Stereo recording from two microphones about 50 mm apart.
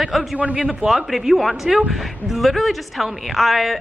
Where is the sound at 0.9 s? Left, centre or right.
Centre.